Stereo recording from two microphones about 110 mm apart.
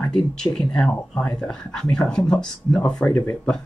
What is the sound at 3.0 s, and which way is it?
Speech, 20° left (ahead or behind).